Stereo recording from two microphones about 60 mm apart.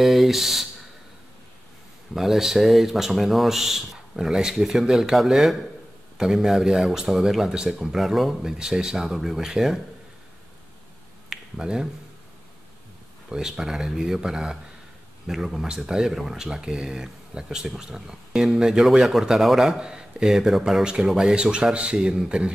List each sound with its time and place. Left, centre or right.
0.0 s speech: centre
2.1 s speech: centre
11.2 s finger snapping: centre
13.3 s speech: centre